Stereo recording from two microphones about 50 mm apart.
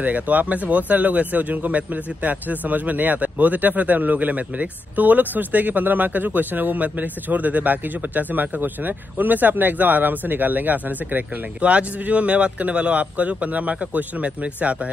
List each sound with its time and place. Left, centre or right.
0.0 s speech: right
11.6 s speech: right